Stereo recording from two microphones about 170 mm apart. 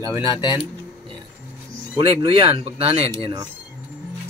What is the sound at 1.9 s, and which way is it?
Speech, 30° right (ahead or behind).